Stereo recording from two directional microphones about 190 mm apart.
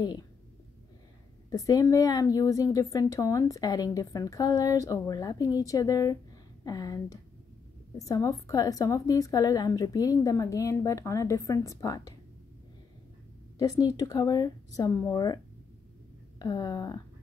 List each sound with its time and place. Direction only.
1.5 s a woman's voice: 20° left (ahead or behind)
13.6 s a woman's voice: 20° left (ahead or behind)